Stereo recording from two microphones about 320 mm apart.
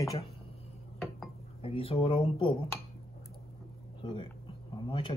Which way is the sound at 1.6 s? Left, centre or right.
Centre.